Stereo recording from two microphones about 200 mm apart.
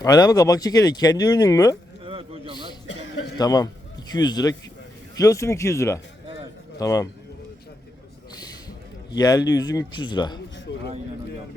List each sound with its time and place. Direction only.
0.0 s speech: 20° left (ahead or behind)
2.0 s a sound: 30° right (ahead or behind)
3.3 s a man's voice: 20° left (ahead or behind)
9.0 s a man's voice: 20° left (ahead or behind)
10.7 s speech: 60° left (ahead or behind)